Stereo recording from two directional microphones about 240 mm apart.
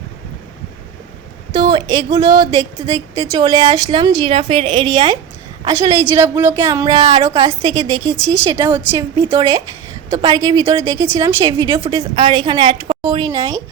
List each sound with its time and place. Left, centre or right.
1.5 s a woman's voice: centre
5.6 s a woman's voice: centre